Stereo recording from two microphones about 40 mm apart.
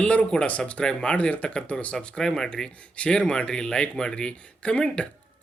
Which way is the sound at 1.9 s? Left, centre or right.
Centre.